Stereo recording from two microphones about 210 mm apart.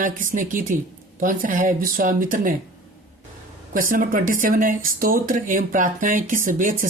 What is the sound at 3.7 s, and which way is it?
Speech, 40° right (ahead or behind).